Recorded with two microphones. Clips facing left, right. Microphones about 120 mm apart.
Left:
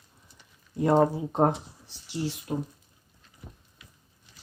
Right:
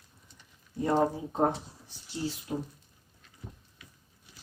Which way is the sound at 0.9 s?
80° left.